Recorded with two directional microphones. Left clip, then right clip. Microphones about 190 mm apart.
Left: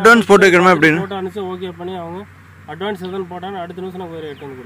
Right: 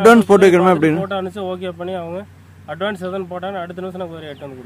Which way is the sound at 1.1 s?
30° right (ahead or behind).